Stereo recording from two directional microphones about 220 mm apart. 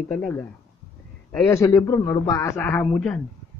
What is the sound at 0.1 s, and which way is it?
A man's voice, 5° left (ahead or behind).